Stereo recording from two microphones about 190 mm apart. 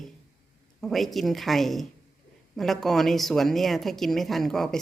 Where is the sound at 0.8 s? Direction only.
Centre (ahead or behind).